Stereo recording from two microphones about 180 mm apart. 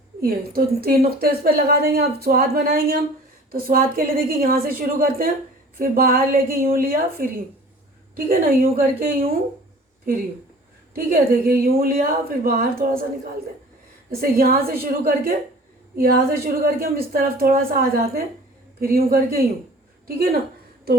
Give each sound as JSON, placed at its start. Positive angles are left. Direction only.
{"t": 0.2, "sound": "a woman's voice", "side_deg": -55}
{"t": 10.9, "sound": "a woman's voice", "side_deg": -55}
{"t": 14.2, "sound": "speech", "side_deg": -55}
{"t": 20.9, "sound": "a sound", "side_deg": -60}